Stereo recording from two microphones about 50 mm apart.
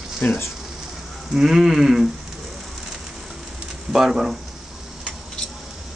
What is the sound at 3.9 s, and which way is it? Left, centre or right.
Speech, centre.